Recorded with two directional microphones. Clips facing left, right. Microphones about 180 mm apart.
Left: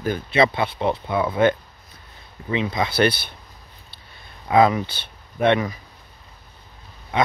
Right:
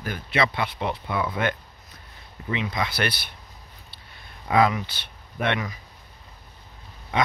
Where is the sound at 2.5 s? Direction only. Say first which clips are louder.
Left 6 dB; 30° left (ahead or behind).